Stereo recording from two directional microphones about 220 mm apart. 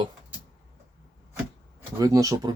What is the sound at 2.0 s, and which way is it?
Speech, 15° right (ahead or behind).